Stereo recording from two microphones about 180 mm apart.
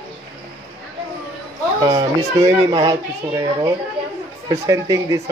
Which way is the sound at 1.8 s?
20° right (ahead or behind).